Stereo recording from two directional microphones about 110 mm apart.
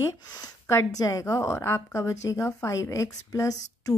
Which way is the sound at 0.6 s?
25° left (ahead or behind).